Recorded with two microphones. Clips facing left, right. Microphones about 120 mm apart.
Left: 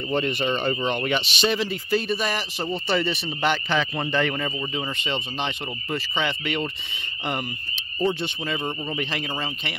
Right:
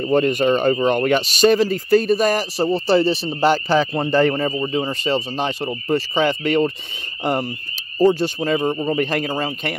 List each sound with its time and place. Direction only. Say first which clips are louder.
0.0 s speech: right 8 dB; 45° right (ahead or behind)